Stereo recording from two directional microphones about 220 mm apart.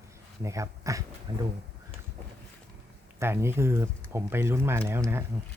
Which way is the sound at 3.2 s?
10° right (ahead or behind).